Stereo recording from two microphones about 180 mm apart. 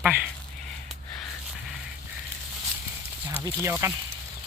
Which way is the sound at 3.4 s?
15° right (ahead or behind).